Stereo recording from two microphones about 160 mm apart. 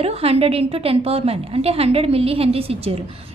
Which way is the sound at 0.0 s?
40° right (ahead or behind).